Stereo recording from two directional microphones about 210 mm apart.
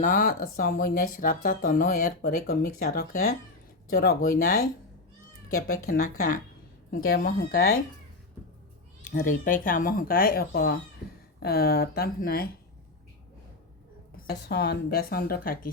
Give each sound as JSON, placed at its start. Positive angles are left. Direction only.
{"t": 0.0, "sound": "speech", "side_deg": 40}
{"t": 5.5, "sound": "speech", "side_deg": 90}
{"t": 5.9, "sound": "speech", "side_deg": 40}
{"t": 9.0, "sound": "speech", "side_deg": 40}
{"t": 14.3, "sound": "speech", "side_deg": 50}